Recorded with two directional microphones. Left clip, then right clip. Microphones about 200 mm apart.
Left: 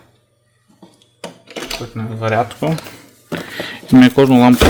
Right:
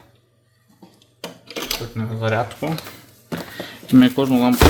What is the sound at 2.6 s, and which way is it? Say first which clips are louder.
Speech: left 6 dB; 45° left (ahead or behind).